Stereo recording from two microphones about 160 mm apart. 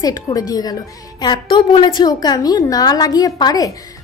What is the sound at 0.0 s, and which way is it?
A woman's voice, 25° left (ahead or behind).